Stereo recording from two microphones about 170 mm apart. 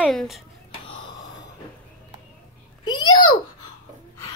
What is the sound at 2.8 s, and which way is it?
Babbling, 25° left (ahead or behind).